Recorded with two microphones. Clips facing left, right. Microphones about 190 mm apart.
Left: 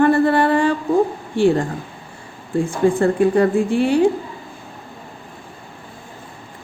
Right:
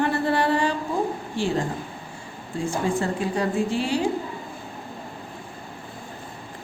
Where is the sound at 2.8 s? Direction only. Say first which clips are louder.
Left 12 dB; 55° left (ahead or behind).